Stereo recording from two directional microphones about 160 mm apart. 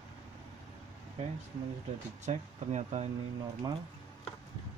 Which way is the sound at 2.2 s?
45° right (ahead or behind).